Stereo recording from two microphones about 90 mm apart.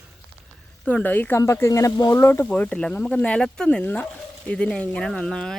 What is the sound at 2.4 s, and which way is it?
Speech, 15° left (ahead or behind).